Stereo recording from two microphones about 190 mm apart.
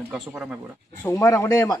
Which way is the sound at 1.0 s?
15° left (ahead or behind).